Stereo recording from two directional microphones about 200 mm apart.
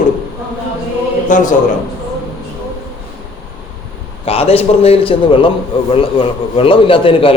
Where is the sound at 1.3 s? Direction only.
40° left (ahead or behind).